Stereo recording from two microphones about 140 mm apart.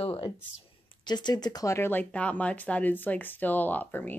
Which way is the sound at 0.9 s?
30° left (ahead or behind).